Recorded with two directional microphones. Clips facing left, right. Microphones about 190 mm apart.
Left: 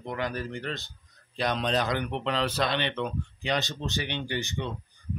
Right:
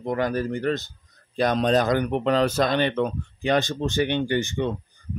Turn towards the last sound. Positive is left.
turn(degrees=-50)  # may be behind; listen again after turning